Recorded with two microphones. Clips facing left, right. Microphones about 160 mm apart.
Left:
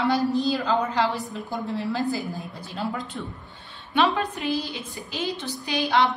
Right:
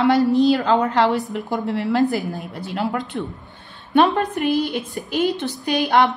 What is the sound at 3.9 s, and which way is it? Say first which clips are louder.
Speech: right 6 dB; 50° right (ahead or behind).